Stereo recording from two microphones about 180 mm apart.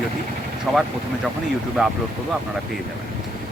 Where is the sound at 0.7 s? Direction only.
Centre (ahead or behind).